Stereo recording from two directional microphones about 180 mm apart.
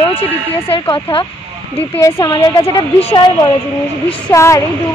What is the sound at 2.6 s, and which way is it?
Speech, 30° left (ahead or behind).